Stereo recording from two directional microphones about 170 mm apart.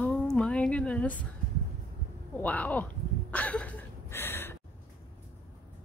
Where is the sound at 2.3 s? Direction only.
10° left (ahead or behind).